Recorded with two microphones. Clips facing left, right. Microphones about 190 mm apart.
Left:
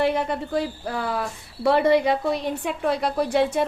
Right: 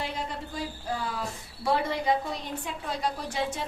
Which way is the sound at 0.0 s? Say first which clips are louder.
Left 11 dB; 65° left (ahead or behind).